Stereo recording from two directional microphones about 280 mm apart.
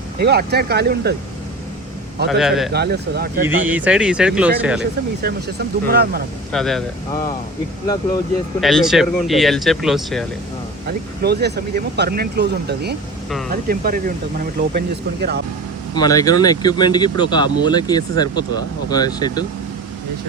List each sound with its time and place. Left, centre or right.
0.2 s speech: right
2.3 s speech: centre
2.7 s speech: right
3.4 s speech: centre
4.8 s speech: right
6.5 s speech: centre
8.6 s speech: centre
11.2 s speech: right
16.0 s speech: centre